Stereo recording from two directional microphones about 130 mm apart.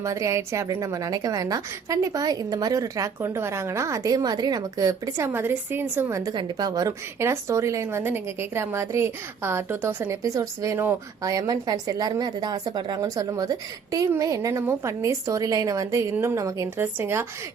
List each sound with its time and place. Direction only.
0.0 s a woman's voice: 25° right (ahead or behind)